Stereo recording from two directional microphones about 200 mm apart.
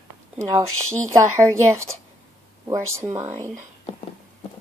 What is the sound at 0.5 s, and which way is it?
Speech, 15° right (ahead or behind).